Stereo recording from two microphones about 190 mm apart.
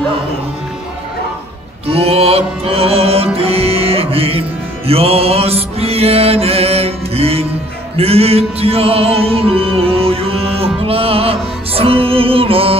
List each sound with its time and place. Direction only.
1.9 s music: 30° right (ahead or behind)